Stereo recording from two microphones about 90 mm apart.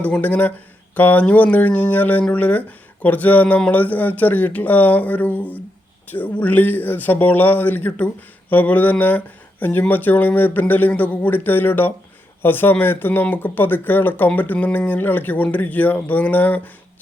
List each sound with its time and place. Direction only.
0.0 s speech: 15° left (ahead or behind)